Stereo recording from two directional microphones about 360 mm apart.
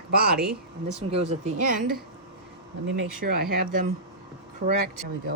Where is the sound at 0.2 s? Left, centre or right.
Right.